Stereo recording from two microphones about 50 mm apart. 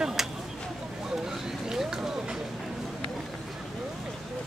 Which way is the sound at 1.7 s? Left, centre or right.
Centre.